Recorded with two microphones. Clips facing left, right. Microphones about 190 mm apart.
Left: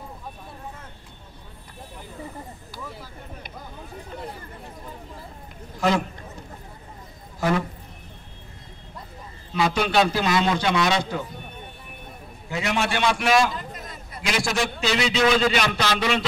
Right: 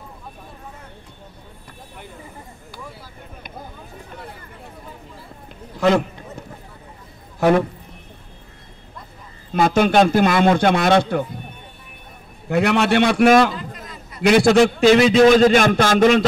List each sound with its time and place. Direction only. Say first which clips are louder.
5.8 s a man's voice: right 6 dB; 60° right (ahead or behind)
7.3 s a sound: right 8 dB; 60° right (ahead or behind)
9.5 s a man's voice: right 7 dB; 50° right (ahead or behind)
12.4 s a man's voice: right 8 dB; 60° right (ahead or behind); by 16.3 s 45° right (ahead or behind)